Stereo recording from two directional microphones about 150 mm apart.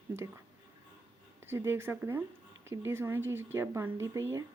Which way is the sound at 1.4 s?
15° right (ahead or behind).